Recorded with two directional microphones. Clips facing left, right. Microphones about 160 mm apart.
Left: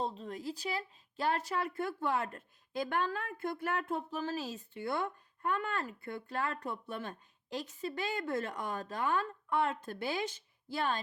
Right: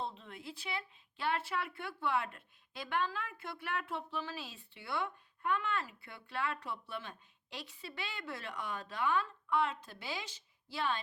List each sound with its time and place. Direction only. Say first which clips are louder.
0.0 s speech: left 6 dB; 40° left (ahead or behind)